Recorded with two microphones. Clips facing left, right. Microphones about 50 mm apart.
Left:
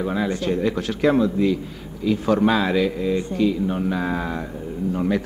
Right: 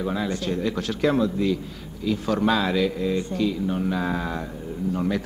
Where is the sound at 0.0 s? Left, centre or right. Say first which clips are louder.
Left 3 dB; left.